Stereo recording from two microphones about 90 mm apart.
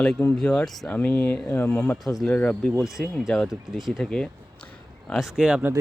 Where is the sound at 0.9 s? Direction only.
20° left (ahead or behind).